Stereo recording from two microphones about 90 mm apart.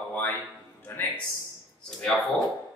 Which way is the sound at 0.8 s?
20° left (ahead or behind).